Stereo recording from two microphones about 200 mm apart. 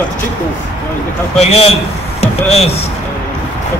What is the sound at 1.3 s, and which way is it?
Speech, 30° left (ahead or behind).